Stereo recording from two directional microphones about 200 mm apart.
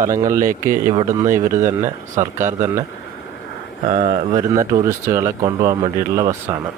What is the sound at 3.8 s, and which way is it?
Speech, 40° right (ahead or behind).